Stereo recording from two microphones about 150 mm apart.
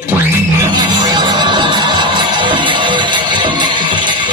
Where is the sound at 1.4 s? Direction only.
30° right (ahead or behind).